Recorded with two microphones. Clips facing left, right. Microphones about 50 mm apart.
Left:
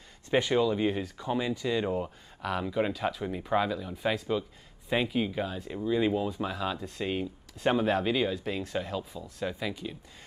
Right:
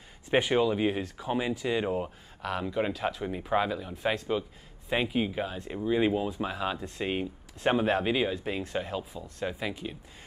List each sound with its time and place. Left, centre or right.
0.3 s speech: right
2.0 s speech: centre; by 6.2 s right
6.2 s speech: centre
9.1 s speech: centre
9.5 s speech: centre